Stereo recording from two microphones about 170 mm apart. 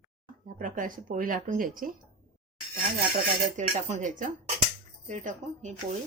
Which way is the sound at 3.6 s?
45° right (ahead or behind).